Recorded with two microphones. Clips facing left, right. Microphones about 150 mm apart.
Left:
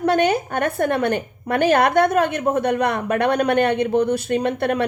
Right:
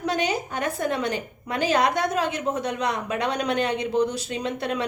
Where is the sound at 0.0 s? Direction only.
60° left (ahead or behind).